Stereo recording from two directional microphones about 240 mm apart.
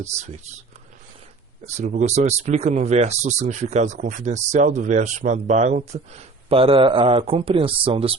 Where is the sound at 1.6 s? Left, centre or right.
Right.